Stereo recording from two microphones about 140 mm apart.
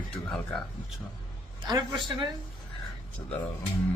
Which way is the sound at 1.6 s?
30° right (ahead or behind).